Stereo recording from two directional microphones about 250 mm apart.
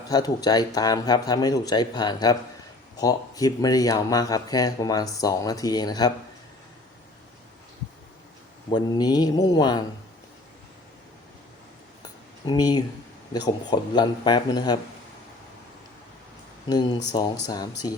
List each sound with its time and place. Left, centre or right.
0.1 s speech: centre
8.7 s speech: centre
12.5 s speech: centre
16.6 s speech: centre